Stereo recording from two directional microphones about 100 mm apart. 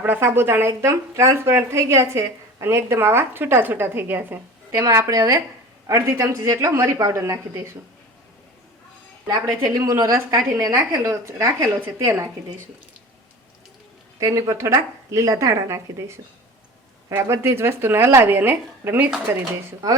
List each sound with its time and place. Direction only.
0.0 s speech: 20° right (ahead or behind)
4.7 s a woman's voice: 30° right (ahead or behind)
9.2 s a woman's voice: 35° right (ahead or behind)
14.2 s a woman's voice: 35° right (ahead or behind); by 19.1 s 20° right (ahead or behind)